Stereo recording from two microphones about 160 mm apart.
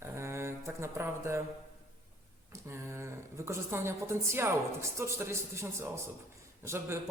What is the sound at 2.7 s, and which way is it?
Speech, 15° right (ahead or behind).